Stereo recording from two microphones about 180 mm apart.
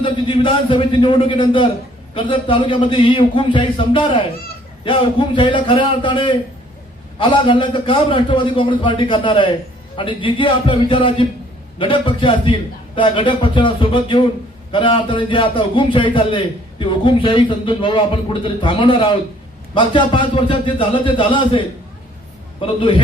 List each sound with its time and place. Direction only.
0.0 s a man's voice: 25° left (ahead or behind)
22.6 s a man's voice: 25° left (ahead or behind)